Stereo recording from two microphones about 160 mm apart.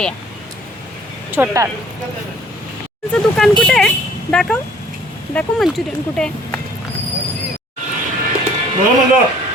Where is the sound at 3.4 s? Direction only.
5° left (ahead or behind).